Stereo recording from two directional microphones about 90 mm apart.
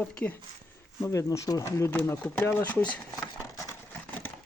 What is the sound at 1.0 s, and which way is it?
Speech, 35° left (ahead or behind).